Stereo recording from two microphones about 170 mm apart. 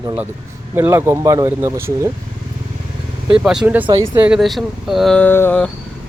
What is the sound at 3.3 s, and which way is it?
Speech, 5° right (ahead or behind).